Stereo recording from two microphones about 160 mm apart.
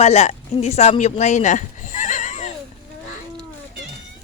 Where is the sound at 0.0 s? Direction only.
40° left (ahead or behind).